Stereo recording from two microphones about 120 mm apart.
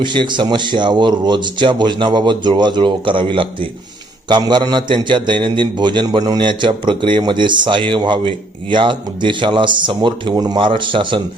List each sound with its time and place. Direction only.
0.0 s a man's voice: 40° right (ahead or behind)
4.3 s a man's voice: 35° right (ahead or behind)